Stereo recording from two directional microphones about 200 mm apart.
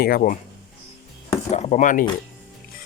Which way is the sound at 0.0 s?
45° left (ahead or behind).